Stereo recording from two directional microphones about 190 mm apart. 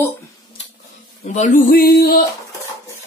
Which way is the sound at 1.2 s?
40° left (ahead or behind).